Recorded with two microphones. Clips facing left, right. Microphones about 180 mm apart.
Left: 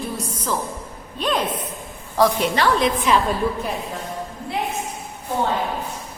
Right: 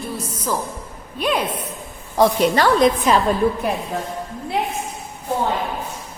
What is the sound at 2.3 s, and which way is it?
Speech, 40° right (ahead or behind).